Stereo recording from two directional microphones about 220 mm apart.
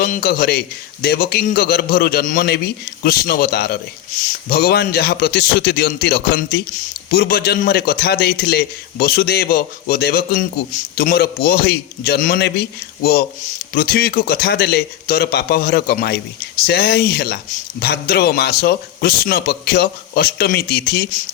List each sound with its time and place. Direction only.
0.0 s speech: 40° left (ahead or behind)